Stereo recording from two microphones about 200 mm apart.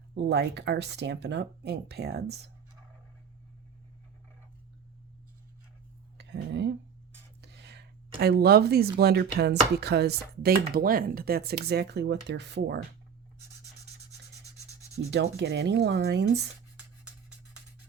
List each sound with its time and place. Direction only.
0.1 s speech: 55° right (ahead or behind)
6.1 s a sound: 60° right (ahead or behind)
7.4 s speech: 55° right (ahead or behind)
15.1 s speech: 55° right (ahead or behind)